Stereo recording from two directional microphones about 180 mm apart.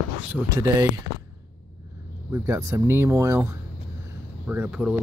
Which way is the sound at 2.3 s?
15° right (ahead or behind).